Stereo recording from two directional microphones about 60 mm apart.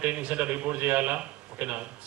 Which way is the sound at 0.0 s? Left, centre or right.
Right.